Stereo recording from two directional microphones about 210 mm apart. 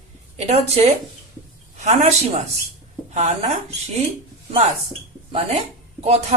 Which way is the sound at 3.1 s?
35° right (ahead or behind).